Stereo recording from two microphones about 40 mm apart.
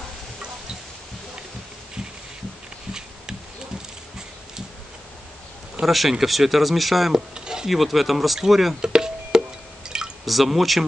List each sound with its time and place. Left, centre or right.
5.9 s speech: centre
7.3 s a sound: centre
7.7 s speech: centre
8.8 s music: centre
9.8 s drip: centre
10.2 s speech: centre